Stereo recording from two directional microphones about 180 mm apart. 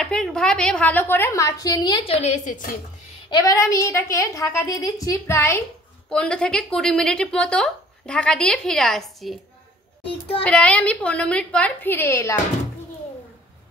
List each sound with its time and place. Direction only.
0.0 s a woman's voice: 5° left (ahead or behind); by 2.7 s 45° left (ahead or behind)
3.3 s a woman's voice: 20° left (ahead or behind); by 9.4 s centre (ahead or behind)
10.4 s a woman's voice: 5° left (ahead or behind)